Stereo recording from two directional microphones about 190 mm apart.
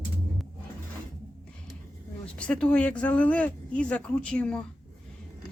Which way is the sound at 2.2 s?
5° left (ahead or behind).